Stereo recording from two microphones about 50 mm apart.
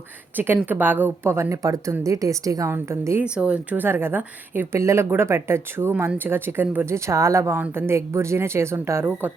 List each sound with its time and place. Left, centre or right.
0.3 s a woman's voice: right
1.3 s a woman's voice: right
2.7 s a woman's voice: right
3.2 s speech: right
3.8 s a woman's voice: right
4.7 s speech: right
6.1 s a woman's voice: right
6.8 s a woman's voice: right
7.8 s speech: right